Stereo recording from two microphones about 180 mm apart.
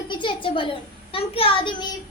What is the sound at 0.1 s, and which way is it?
A child's voice, 25° left (ahead or behind).